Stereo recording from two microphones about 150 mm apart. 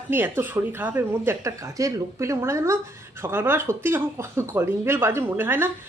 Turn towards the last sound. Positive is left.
turn(degrees=-15)  # may be behind; listen again after turning